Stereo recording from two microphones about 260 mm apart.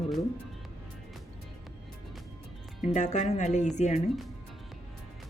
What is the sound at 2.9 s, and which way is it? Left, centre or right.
Speech, left.